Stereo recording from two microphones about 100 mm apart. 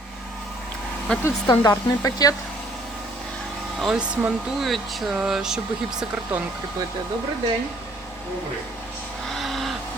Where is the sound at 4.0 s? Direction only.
10° right (ahead or behind).